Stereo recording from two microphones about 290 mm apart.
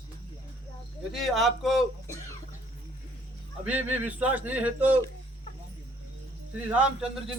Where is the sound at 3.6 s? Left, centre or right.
Centre.